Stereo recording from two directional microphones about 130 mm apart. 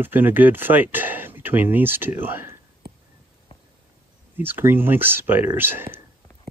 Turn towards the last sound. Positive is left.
turn(degrees=-15)  # may be behind; listen again after turning